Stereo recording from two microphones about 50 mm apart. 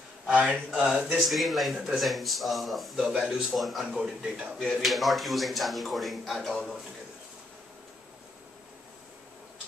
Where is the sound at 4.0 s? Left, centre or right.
Centre.